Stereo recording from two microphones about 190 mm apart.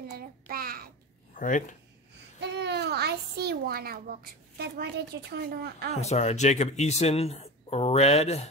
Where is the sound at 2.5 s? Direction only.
60° right (ahead or behind).